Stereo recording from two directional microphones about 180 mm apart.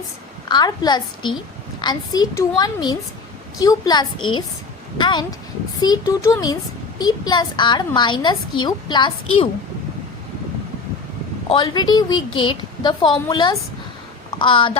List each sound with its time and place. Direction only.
0.4 s a woman's voice: 25° left (ahead or behind)
11.4 s a woman's voice: 25° left (ahead or behind)